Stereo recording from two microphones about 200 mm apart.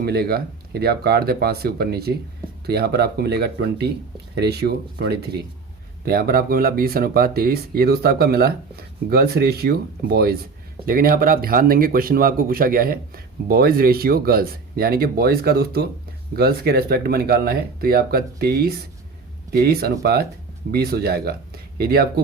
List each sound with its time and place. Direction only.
0.0 s speech: 50° right (ahead or behind)